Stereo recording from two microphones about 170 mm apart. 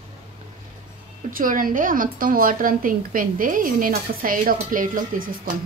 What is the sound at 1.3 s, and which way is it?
A woman's voice, 55° right (ahead or behind).